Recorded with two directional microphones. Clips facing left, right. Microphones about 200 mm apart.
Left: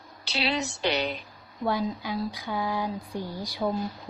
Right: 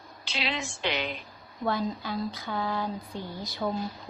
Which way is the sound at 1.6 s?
10° left (ahead or behind).